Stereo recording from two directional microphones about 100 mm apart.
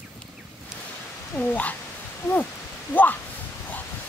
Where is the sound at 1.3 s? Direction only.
15° left (ahead or behind).